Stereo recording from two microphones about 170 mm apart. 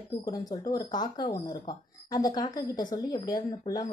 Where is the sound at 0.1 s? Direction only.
20° left (ahead or behind).